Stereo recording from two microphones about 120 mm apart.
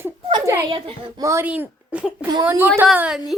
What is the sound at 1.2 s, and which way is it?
Speech, 25° right (ahead or behind).